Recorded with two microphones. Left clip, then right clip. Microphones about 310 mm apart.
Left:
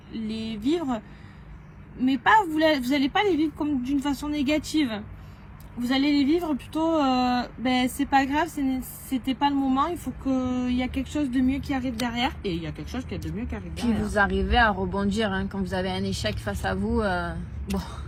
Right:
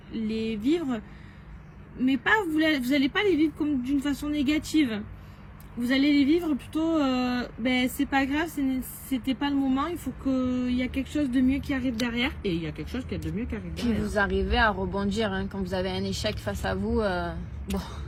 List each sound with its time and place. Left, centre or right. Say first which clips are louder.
0.1 s speech: right 3 dB; centre
2.0 s speech: left 4 dB; centre
13.7 s speech: left 3 dB; centre